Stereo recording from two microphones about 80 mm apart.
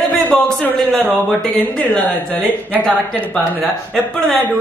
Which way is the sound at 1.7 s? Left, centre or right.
Centre.